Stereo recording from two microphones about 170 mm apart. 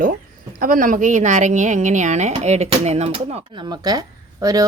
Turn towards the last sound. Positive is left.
turn(degrees=-20)  # may be behind; listen again after turning